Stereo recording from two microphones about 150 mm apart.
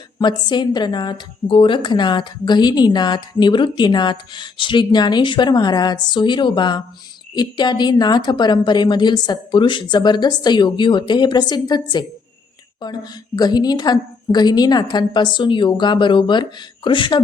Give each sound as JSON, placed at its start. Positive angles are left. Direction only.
{"t": 0.2, "sound": "a woman's voice", "side_deg": 30}